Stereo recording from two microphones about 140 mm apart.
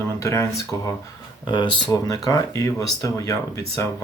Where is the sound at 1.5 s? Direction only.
35° left (ahead or behind).